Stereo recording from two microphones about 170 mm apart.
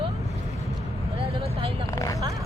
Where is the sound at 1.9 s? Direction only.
20° left (ahead or behind).